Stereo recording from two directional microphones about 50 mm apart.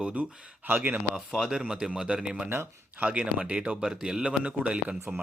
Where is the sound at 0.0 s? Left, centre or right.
Right.